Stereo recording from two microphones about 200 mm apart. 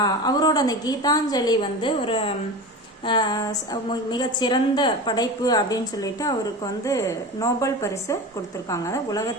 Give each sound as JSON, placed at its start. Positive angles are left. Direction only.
{"t": 0.0, "sound": "a woman's voice", "side_deg": 20}
{"t": 7.4, "sound": "a woman's voice", "side_deg": 15}